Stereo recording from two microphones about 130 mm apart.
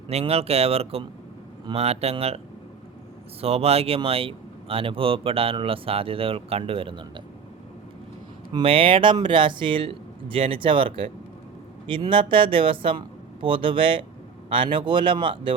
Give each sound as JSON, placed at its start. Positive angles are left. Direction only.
{"t": 0.1, "sound": "speech", "side_deg": -50}
{"t": 3.4, "sound": "speech", "side_deg": -50}
{"t": 8.5, "sound": "speech", "side_deg": -45}